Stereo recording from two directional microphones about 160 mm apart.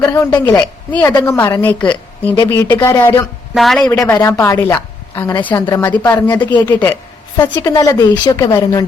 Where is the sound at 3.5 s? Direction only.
Centre (ahead or behind).